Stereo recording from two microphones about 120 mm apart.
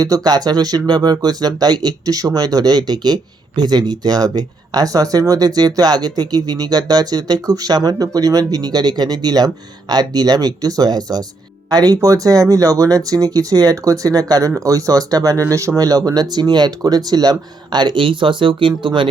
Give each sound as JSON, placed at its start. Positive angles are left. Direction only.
{"t": 0.0, "sound": "speech", "side_deg": -30}